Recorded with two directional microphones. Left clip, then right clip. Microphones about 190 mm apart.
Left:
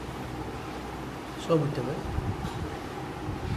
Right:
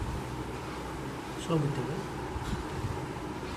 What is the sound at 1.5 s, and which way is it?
Speech, 45° left (ahead or behind).